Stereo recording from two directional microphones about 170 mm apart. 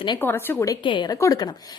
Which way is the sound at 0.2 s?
10° left (ahead or behind).